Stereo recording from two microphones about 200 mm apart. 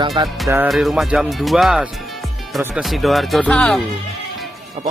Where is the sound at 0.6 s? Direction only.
Centre (ahead or behind).